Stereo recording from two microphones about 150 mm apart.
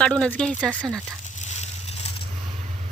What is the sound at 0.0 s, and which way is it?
Speech, 5° left (ahead or behind).